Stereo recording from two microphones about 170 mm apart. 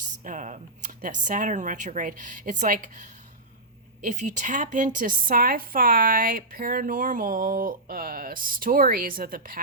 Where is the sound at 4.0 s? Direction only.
45° right (ahead or behind).